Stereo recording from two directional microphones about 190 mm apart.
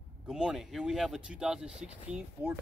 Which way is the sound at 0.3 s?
5° right (ahead or behind).